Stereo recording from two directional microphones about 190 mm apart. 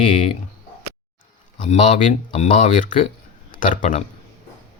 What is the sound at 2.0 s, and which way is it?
Speech, 30° left (ahead or behind).